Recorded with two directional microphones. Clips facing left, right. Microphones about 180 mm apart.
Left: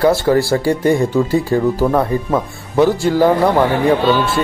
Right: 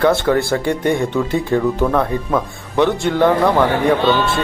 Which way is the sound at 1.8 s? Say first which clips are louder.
Left 2 dB; 20° left (ahead or behind).